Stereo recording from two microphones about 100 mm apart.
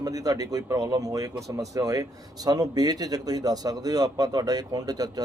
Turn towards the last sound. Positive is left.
turn(degrees=-40)  # may be behind; listen again after turning